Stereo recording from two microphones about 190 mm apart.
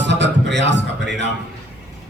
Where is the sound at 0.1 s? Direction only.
65° right (ahead or behind).